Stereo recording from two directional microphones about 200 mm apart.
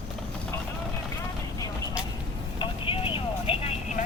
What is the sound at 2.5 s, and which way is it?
Vehicle, 25° left (ahead or behind).